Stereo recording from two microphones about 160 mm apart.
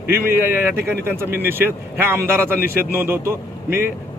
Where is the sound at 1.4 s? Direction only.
15° right (ahead or behind).